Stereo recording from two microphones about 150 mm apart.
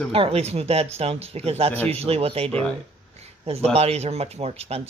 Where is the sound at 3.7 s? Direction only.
45° right (ahead or behind).